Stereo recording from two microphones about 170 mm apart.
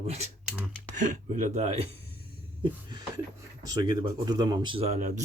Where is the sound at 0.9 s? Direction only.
45° right (ahead or behind).